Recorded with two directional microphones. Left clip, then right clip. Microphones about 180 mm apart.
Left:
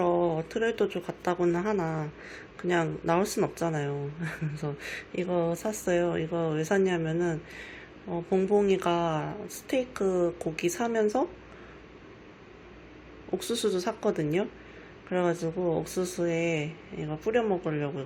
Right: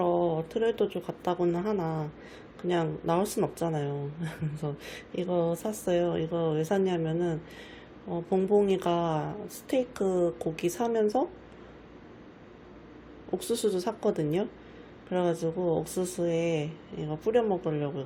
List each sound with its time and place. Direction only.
0.0 s speech: 5° right (ahead or behind)
8.1 s speech: 5° right (ahead or behind)
13.5 s speech: 5° right (ahead or behind)
16.6 s speech: 15° right (ahead or behind)